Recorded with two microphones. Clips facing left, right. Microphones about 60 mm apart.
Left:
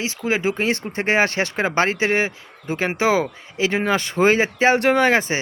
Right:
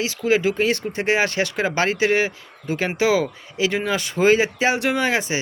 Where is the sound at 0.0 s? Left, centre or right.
Left.